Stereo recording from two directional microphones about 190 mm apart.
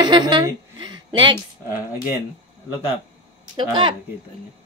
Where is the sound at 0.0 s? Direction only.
20° right (ahead or behind).